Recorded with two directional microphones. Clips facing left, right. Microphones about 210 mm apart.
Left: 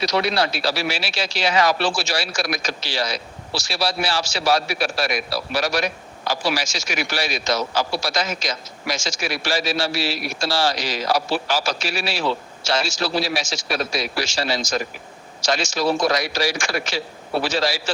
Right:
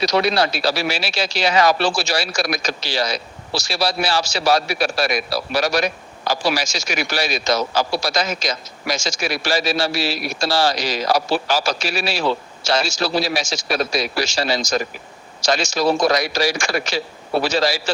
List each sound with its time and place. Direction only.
0.0 s speech: 40° right (ahead or behind)